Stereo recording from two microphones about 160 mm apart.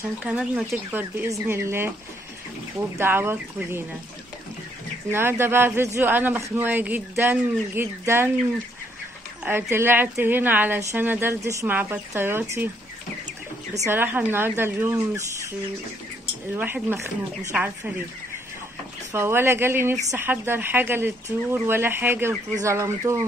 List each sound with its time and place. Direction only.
0.2 s speech: 5° right (ahead or behind)
3.0 s speech: 15° right (ahead or behind)
5.1 s speech: 15° right (ahead or behind)
9.4 s speech: 15° right (ahead or behind)
13.8 s speech: 15° right (ahead or behind)
16.5 s speech: 10° right (ahead or behind)
19.1 s speech: 15° right (ahead or behind)